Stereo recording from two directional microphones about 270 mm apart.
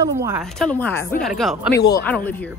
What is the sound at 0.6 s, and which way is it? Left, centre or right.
A woman's voice, centre.